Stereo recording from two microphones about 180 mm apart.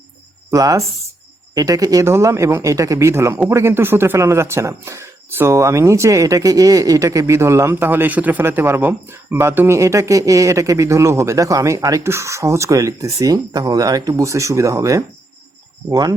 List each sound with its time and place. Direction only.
0.5 s speech: 20° right (ahead or behind)